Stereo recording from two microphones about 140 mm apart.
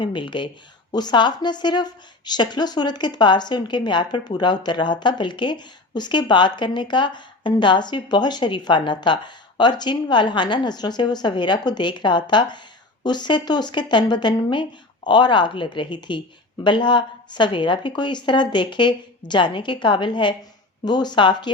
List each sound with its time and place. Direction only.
0.0 s a woman's voice: 35° left (ahead or behind)